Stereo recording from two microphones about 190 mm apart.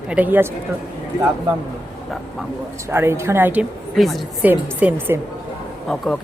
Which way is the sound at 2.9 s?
10° right (ahead or behind).